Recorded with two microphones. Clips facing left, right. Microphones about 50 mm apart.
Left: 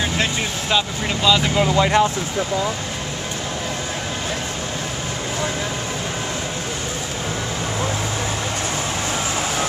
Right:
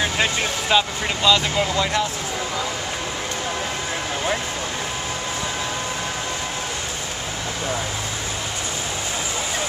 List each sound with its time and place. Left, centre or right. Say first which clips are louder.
0.0 s speech: even; centre
1.3 s speech: left 3 dB; centre
1.8 s speech: left 8 dB; left